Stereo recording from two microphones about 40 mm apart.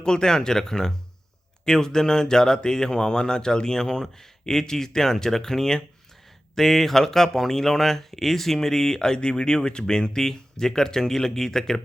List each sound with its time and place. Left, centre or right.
0.0 s speech: centre